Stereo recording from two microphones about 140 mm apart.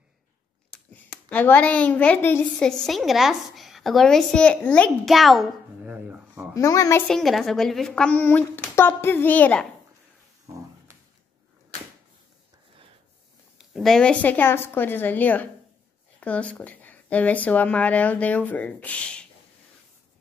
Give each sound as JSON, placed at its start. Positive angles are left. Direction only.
{"t": 0.7, "sound": "a woman's voice", "side_deg": 5}
{"t": 6.0, "sound": "babbling", "side_deg": -10}
{"t": 6.5, "sound": "a child's voice", "side_deg": 25}
{"t": 7.1, "sound": "speech", "side_deg": 0}
{"t": 10.4, "sound": "a sound", "side_deg": -25}
{"t": 13.6, "sound": "speech", "side_deg": 0}